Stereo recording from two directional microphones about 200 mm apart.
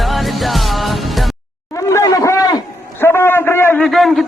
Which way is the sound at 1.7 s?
15° left (ahead or behind).